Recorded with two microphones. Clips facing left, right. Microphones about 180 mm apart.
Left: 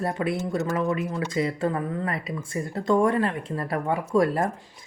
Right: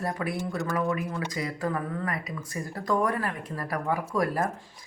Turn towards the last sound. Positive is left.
turn(degrees=25)  # may be behind; listen again after turning